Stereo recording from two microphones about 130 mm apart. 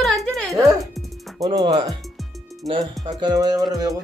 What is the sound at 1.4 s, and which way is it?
Speech, 30° right (ahead or behind).